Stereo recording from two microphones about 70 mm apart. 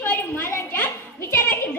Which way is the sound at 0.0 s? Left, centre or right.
Left.